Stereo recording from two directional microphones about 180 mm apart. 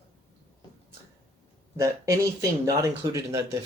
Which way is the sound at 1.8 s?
20° right (ahead or behind).